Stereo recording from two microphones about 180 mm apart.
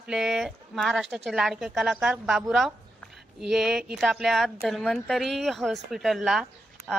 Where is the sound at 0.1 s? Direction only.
Centre (ahead or behind).